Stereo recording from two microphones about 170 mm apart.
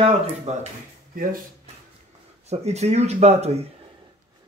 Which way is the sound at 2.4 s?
40° right (ahead or behind).